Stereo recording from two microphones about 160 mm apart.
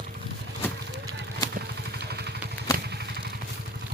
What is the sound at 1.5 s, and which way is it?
Vehicle, 90° right.